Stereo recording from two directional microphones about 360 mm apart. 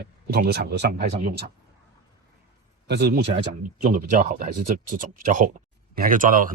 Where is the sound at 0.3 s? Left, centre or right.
Right.